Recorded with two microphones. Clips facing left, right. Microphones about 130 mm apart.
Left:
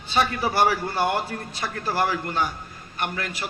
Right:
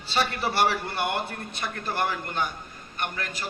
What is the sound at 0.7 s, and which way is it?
Speech, 60° right (ahead or behind).